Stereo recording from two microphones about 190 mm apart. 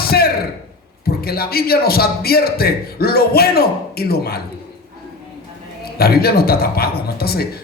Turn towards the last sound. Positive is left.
turn(degrees=55)  # may be behind; listen again after turning